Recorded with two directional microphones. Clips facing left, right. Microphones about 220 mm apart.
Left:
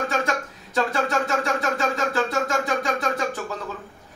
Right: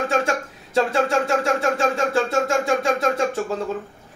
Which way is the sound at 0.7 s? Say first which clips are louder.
Right 4 dB; 30° right (ahead or behind).